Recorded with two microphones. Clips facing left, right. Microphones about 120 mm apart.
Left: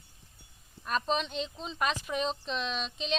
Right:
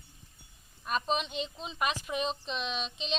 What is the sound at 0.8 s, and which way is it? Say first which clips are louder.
Speech: left 1 dB; 5° right (ahead or behind).